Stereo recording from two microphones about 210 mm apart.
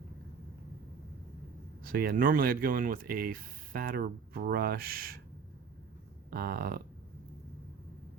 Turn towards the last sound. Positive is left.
turn(degrees=-45)  # may be behind; listen again after turning